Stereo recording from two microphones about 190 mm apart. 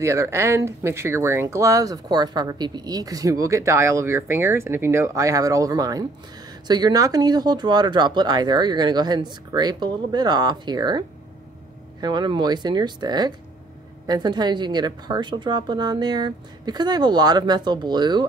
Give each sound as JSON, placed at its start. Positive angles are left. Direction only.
{"t": 0.0, "sound": "speech", "side_deg": -15}